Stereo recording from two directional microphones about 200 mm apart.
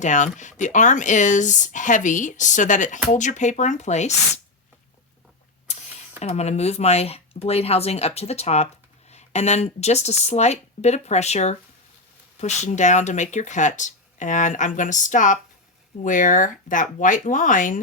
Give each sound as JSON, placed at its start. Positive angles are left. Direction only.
{"t": 0.0, "sound": "speech", "side_deg": 40}
{"t": 5.7, "sound": "a sound", "side_deg": 35}
{"t": 6.1, "sound": "speech", "side_deg": 35}